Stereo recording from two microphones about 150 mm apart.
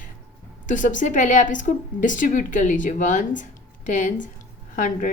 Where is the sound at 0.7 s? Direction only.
55° left (ahead or behind).